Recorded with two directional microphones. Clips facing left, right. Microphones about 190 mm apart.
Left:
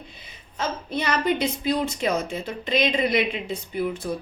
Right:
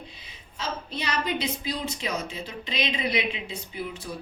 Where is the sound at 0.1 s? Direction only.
50° left (ahead or behind).